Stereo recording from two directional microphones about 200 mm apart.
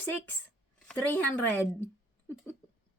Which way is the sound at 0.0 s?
10° left (ahead or behind).